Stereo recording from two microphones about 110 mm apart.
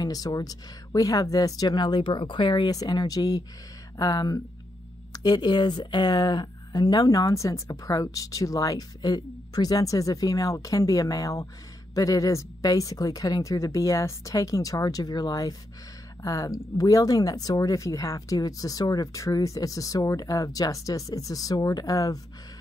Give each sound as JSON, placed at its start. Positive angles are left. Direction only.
{"t": 0.0, "sound": "a woman's voice", "side_deg": 35}